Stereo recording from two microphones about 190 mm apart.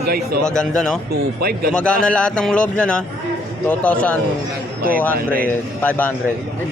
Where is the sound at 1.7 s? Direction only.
5° left (ahead or behind).